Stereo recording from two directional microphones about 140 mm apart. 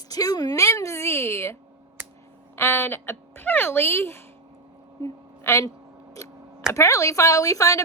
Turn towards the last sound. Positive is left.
turn(degrees=25)  # may be behind; listen again after turning